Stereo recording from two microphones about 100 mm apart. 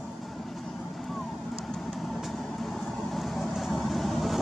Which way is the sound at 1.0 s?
5° left (ahead or behind).